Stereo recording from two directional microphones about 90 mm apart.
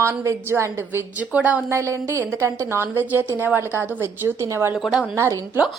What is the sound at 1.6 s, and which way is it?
A woman's voice, 35° right (ahead or behind).